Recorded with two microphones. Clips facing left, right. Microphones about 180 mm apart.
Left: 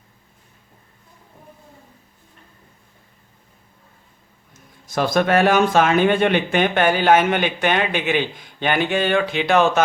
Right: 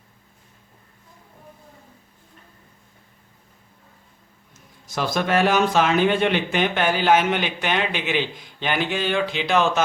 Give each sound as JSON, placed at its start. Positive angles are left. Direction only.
{"t": 4.9, "sound": "speech", "side_deg": 50}